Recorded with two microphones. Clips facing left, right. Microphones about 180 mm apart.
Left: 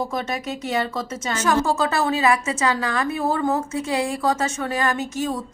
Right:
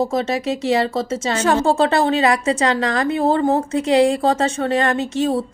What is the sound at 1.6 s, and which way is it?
A woman's voice, 60° right (ahead or behind).